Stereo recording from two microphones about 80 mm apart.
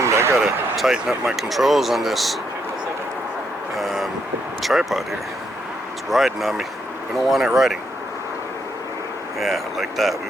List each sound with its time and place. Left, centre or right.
0.0 s a sound: right
0.4 s speech: centre
3.8 s vehicle: centre
4.6 s speech: centre
6.1 s speech: centre
9.4 s speech: centre